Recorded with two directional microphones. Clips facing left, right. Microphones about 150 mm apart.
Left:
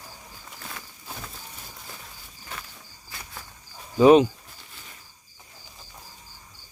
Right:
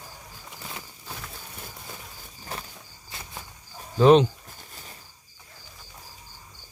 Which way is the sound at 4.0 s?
5° left (ahead or behind).